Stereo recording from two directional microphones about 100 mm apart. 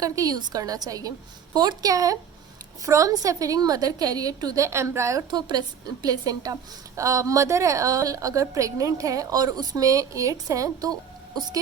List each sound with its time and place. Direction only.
0.0 s a woman's voice: 35° right (ahead or behind)
5.3 s a woman's voice: 45° right (ahead or behind)